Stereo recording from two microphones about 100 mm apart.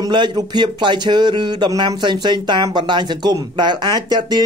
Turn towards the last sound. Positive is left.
turn(degrees=-45)  # may be behind; listen again after turning